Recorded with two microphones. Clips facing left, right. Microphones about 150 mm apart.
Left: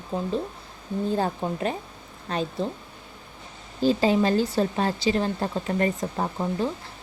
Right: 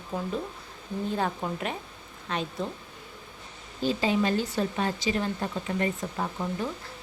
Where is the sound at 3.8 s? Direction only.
35° left (ahead or behind).